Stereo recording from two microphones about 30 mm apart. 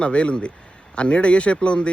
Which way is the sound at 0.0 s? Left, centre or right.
Left.